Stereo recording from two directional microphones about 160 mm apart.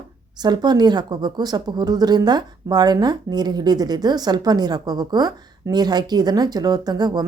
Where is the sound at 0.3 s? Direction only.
25° right (ahead or behind).